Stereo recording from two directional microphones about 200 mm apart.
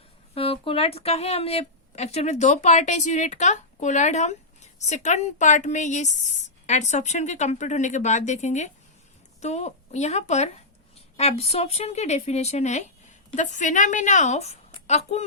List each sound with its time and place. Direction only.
0.3 s speech: 25° left (ahead or behind)